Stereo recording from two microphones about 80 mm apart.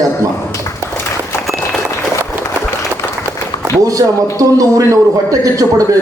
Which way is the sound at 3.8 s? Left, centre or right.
Right.